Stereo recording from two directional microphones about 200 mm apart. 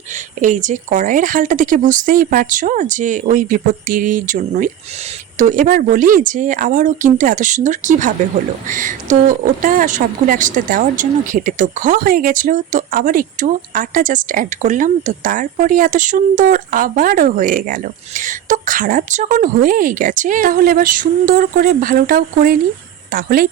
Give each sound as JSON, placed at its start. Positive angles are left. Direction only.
{"t": 0.4, "sound": "speech", "side_deg": -40}